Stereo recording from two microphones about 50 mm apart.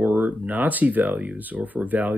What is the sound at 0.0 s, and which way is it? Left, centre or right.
Speech, right.